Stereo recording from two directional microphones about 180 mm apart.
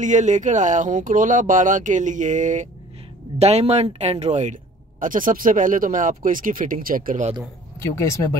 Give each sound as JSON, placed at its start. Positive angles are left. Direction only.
{"t": 0.0, "sound": "speech", "side_deg": -45}